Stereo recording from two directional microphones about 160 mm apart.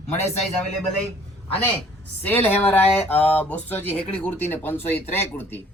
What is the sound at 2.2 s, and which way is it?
Speech, 10° left (ahead or behind).